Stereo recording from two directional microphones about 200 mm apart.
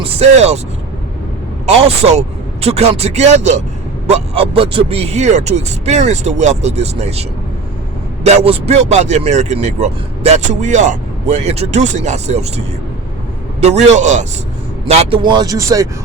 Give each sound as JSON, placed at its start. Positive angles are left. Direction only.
{"t": 0.2, "sound": "speech", "side_deg": -30}
{"t": 1.6, "sound": "speech", "side_deg": -35}
{"t": 14.8, "sound": "speech", "side_deg": -25}